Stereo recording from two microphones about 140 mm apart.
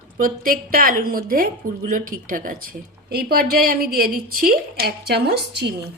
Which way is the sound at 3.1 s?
90° right.